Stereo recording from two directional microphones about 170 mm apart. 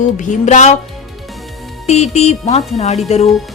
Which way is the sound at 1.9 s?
40° left (ahead or behind).